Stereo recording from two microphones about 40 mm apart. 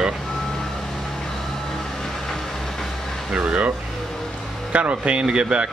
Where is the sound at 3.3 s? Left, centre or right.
Right.